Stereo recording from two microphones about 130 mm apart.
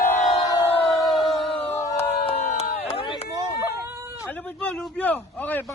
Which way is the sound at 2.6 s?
55° left (ahead or behind).